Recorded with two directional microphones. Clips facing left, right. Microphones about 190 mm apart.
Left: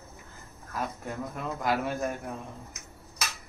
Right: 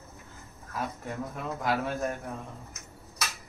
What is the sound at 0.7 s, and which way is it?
Speech, 5° left (ahead or behind).